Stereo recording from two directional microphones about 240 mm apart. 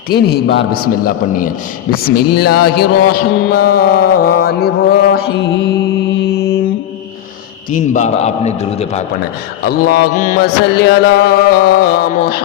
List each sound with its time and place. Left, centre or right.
0.1 s mantra: left
2.5 s music: left
2.7 s mantra: left
7.8 s a man's voice: left
9.6 s mantra: left